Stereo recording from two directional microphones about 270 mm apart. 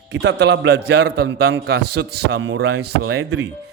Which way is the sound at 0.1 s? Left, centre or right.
Right.